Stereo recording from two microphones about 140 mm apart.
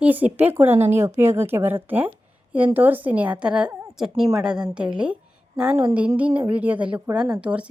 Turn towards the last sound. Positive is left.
turn(degrees=-10)  # may be behind; listen again after turning